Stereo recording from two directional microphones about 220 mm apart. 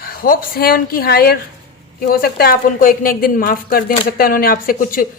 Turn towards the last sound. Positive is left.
turn(degrees=40)  # may be behind; listen again after turning